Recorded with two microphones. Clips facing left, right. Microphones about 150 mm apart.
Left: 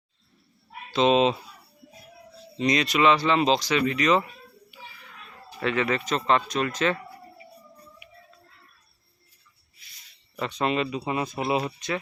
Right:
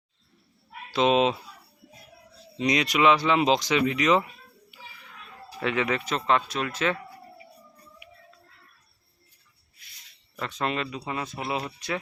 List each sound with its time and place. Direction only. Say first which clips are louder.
0.9 s speech: left 1 dB; 5° right (ahead or behind)
2.6 s speech: left 1 dB; 10° right (ahead or behind)
5.5 s speech: left 1 dB; 10° right (ahead or behind)
10.3 s speech: left 4 dB; centre (ahead or behind)
11.0 s speech: left 5 dB; 15° left (ahead or behind)